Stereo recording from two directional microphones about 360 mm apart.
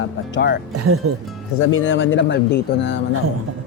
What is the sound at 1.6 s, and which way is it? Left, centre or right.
Speech, left.